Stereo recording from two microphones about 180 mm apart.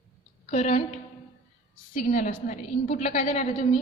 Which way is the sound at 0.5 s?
35° left (ahead or behind).